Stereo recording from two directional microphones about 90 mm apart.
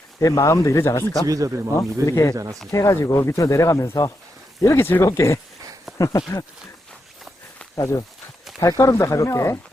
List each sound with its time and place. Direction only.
0.2 s speech: 35° left (ahead or behind)
1.3 s speech: 35° right (ahead or behind)
2.0 s speech: 35° left (ahead or behind)
2.3 s speech: 40° right (ahead or behind)
2.7 s speech: 35° left (ahead or behind)
7.8 s speech: 35° left (ahead or behind)
8.5 s a sound: 5° right (ahead or behind)
8.8 s speech: 35° left (ahead or behind)